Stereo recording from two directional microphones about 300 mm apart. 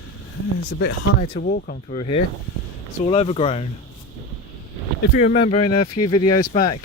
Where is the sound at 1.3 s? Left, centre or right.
Left.